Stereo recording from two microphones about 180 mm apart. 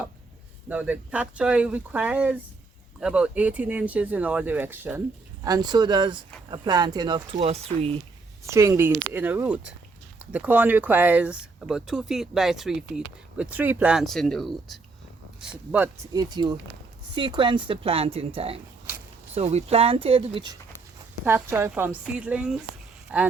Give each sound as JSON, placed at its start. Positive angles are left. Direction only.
{"t": 0.7, "sound": "speech", "side_deg": -5}
{"t": 5.5, "sound": "speech", "side_deg": -20}
{"t": 7.4, "sound": "a woman's voice", "side_deg": -35}
{"t": 8.4, "sound": "speech", "side_deg": -15}
{"t": 16.1, "sound": "a woman's voice", "side_deg": -25}
{"t": 21.2, "sound": "speech", "side_deg": -10}